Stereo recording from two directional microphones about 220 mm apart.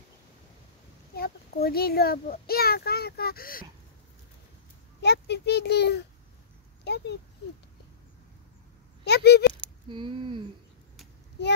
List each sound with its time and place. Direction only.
1.1 s a child's voice: 45° left (ahead or behind)
5.0 s a child's voice: 50° left (ahead or behind)
9.0 s speech: 50° left (ahead or behind)
9.8 s speech: 20° right (ahead or behind)